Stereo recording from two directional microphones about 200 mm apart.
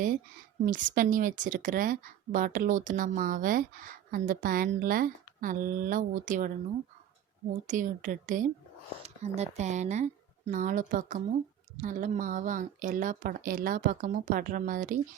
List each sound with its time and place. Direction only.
0.6 s a woman's voice: 40° right (ahead or behind)
7.7 s speech: 40° right (ahead or behind)